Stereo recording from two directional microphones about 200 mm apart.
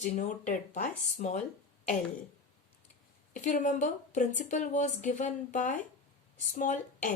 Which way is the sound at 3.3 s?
40° left (ahead or behind).